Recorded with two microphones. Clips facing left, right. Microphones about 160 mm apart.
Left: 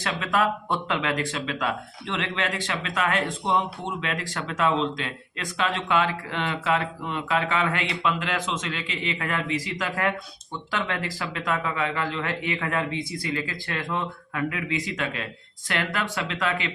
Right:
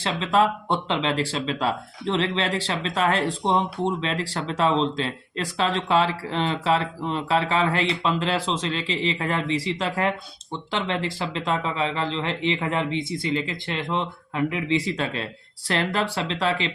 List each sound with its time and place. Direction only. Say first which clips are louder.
0.0 s speech: right 3 dB; 30° right (ahead or behind)